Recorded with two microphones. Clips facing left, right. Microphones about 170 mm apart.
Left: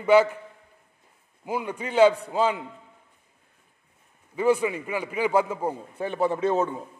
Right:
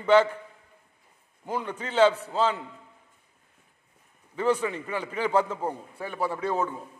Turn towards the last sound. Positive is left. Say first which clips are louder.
# left 5 dB
turn(degrees=20)  # may be behind; listen again after turning